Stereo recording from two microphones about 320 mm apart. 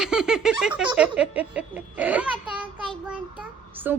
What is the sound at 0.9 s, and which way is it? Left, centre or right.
A child's voice, centre.